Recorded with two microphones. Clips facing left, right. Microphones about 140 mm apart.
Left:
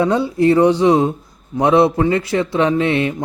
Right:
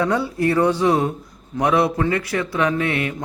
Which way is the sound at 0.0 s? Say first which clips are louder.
Left 5 dB; 20° left (ahead or behind).